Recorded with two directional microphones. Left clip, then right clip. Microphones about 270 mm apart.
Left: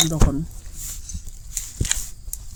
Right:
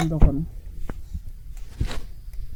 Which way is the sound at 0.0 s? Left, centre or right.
Left.